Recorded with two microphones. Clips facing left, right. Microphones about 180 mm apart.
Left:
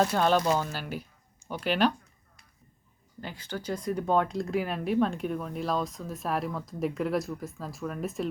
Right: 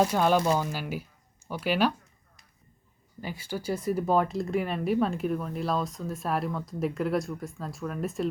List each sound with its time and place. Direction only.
0.0 s speech: 10° right (ahead or behind)
3.2 s speech: 10° right (ahead or behind)